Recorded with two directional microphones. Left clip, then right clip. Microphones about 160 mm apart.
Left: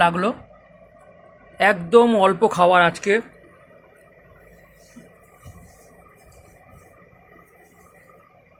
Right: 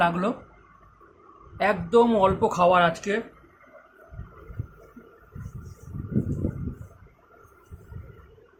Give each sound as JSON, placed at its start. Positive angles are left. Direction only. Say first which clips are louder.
{"t": 0.0, "sound": "speech", "louder": "left 5 dB", "side_deg": 35}
{"t": 1.5, "sound": "speech", "louder": "left 6 dB", "side_deg": 40}